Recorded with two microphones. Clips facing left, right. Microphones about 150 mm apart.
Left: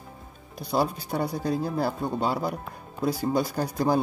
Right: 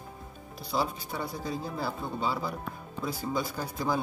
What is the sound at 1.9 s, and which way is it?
Speech, 45° left (ahead or behind).